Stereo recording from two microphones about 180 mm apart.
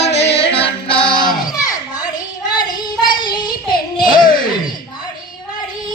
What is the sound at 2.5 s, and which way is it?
Child singing, 25° left (ahead or behind).